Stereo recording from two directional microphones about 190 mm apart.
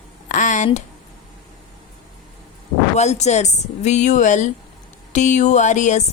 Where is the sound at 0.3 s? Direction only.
40° left (ahead or behind).